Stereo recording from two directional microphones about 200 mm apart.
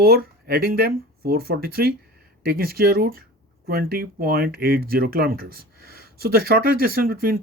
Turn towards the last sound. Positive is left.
turn(degrees=-45)  # may be behind; listen again after turning